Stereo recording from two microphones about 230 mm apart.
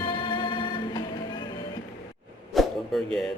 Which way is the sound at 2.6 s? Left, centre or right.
Centre.